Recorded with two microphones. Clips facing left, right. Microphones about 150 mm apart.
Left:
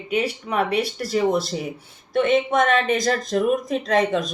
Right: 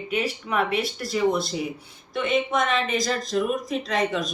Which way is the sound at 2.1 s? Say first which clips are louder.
Left 5 dB; 45° left (ahead or behind).